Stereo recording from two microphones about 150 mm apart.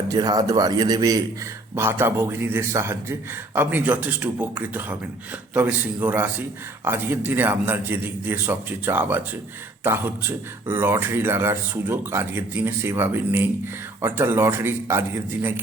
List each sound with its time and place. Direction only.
0.1 s a man's voice: 25° right (ahead or behind)
1.7 s speech: 15° right (ahead or behind)